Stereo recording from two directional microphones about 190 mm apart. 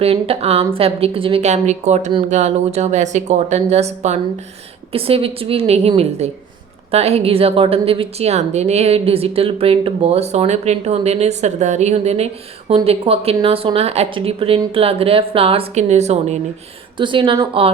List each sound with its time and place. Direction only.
0.0 s a woman's voice: 30° right (ahead or behind)
17.0 s speech: 25° right (ahead or behind)